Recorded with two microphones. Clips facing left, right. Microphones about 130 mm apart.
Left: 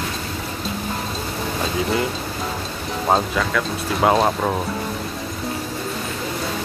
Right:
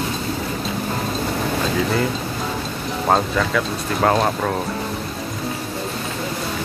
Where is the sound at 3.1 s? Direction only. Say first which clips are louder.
Right 1 dB; centre (ahead or behind).